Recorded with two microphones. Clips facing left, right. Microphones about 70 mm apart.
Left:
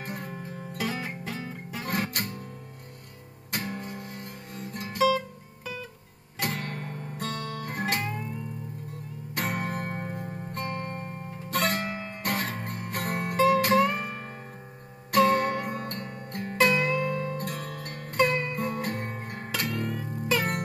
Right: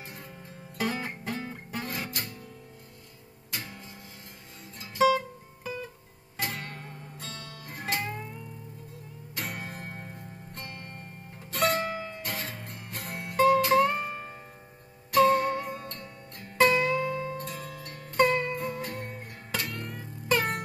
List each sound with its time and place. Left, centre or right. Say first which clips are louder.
0.0 s music: left 8 dB; left
0.7 s music: right 1 dB; centre
1.9 s music: left 6 dB; left
3.5 s music: left 7 dB; left
4.6 s guitar: left 10 dB; left
5.0 s music: right 1 dB; right
6.4 s guitar: left 4 dB; left
8.9 s music: left 5 dB; left